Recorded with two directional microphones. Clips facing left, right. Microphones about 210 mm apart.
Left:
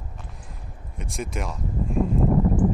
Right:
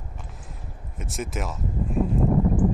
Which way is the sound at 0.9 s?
Centre (ahead or behind).